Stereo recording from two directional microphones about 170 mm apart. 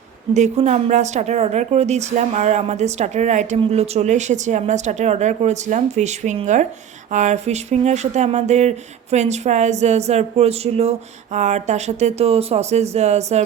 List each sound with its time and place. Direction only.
0.3 s speech: 45° right (ahead or behind)